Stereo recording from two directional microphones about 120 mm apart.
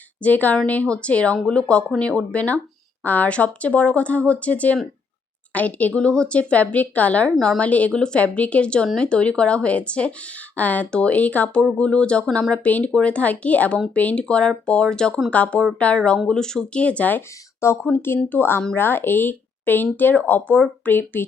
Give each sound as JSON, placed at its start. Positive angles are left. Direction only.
{"t": 0.2, "sound": "a woman's voice", "side_deg": 15}